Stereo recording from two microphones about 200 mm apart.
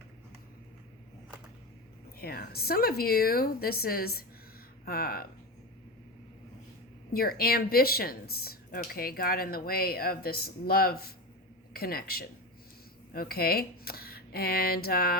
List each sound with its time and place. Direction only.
2.1 s speech: 50° left (ahead or behind)
7.1 s speech: 50° left (ahead or behind)